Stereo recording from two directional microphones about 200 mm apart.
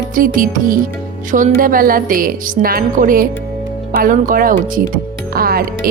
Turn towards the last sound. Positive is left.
turn(degrees=-45)  # may be behind; listen again after turning